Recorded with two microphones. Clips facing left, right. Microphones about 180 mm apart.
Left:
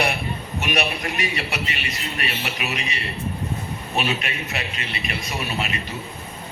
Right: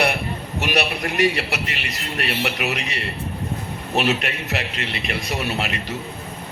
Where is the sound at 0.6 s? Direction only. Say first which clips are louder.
Right 2 dB; 70° right (ahead or behind).